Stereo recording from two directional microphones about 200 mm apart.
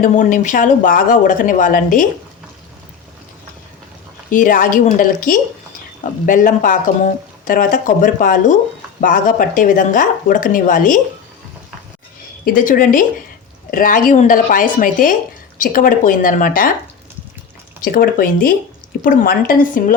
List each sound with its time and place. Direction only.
0.0 s speech: 40° left (ahead or behind)
4.3 s speech: 40° left (ahead or behind)
12.5 s speech: 45° left (ahead or behind)
17.8 s speech: 45° left (ahead or behind)